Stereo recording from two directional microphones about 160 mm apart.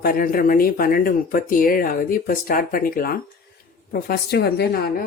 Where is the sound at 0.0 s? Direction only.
65° left (ahead or behind).